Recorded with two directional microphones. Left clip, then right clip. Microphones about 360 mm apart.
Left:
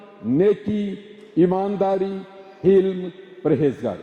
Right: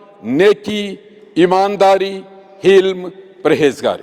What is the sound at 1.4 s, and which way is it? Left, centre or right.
A man's voice, centre.